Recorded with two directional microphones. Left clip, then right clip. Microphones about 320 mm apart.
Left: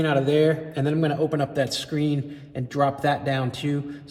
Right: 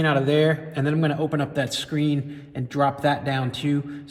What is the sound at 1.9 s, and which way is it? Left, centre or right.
Speech, centre.